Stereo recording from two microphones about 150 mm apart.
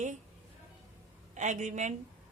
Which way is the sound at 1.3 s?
55° right (ahead or behind).